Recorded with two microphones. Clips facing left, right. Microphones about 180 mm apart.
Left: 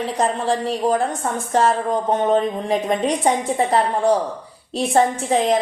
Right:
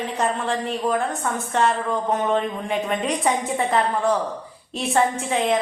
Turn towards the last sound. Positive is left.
turn(degrees=35)  # may be behind; listen again after turning